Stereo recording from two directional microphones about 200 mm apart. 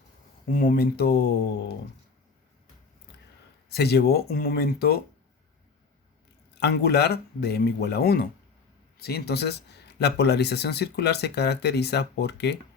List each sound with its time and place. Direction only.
0.4 s speech: 45° left (ahead or behind)
3.7 s speech: 55° left (ahead or behind)
6.5 s speech: 55° left (ahead or behind)